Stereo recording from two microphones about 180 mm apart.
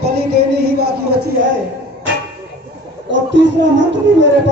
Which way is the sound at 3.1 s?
80° right.